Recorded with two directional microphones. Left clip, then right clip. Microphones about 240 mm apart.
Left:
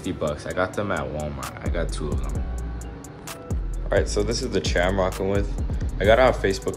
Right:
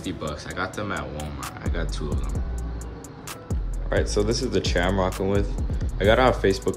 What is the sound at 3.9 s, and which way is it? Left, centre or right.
Speech, centre.